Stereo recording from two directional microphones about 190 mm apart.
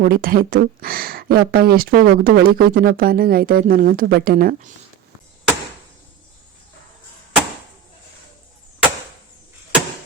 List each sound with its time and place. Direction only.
0.0 s speech: 50° right (ahead or behind)